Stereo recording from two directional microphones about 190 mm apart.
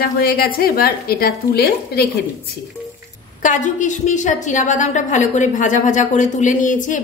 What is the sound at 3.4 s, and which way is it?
A woman's voice, 40° left (ahead or behind).